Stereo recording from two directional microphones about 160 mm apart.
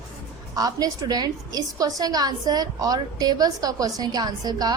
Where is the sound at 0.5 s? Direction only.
25° right (ahead or behind).